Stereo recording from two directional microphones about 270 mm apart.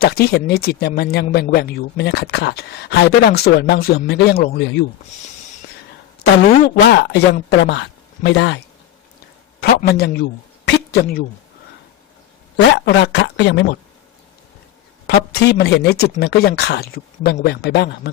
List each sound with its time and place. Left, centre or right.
0.0 s speech: left
6.7 s speech: left
9.6 s a man's voice: left
12.5 s speech: left
15.0 s speech: left